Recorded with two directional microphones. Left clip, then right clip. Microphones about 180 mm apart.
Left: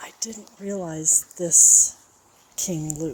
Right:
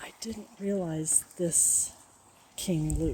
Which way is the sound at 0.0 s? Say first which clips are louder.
Left 6 dB; 20° right (ahead or behind).